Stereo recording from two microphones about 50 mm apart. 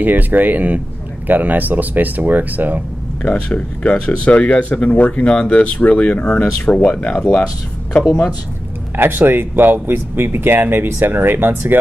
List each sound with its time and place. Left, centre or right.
0.0 s speech: right
3.2 s speech: left
6.2 s speech: centre
8.9 s speech: right